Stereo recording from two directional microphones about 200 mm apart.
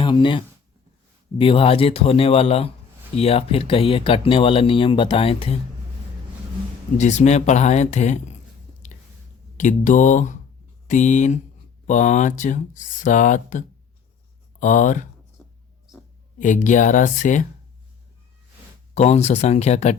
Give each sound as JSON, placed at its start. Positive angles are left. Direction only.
{"t": 0.0, "sound": "speech", "side_deg": 25}
{"t": 6.9, "sound": "speech", "side_deg": 35}
{"t": 9.6, "sound": "speech", "side_deg": 40}
{"t": 16.4, "sound": "speech", "side_deg": 40}
{"t": 18.9, "sound": "speech", "side_deg": 35}